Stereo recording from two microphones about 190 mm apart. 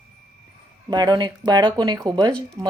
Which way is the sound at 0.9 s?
20° right (ahead or behind).